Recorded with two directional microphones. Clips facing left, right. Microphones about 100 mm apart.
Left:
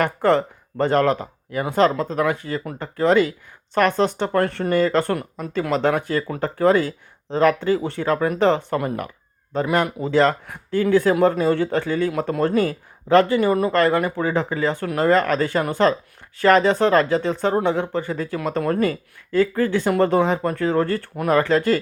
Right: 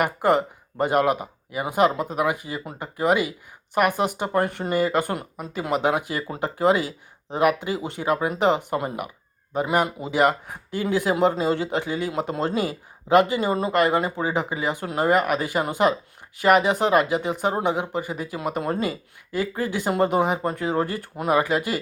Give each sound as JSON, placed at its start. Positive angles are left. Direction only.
{"t": 0.0, "sound": "speech", "side_deg": -15}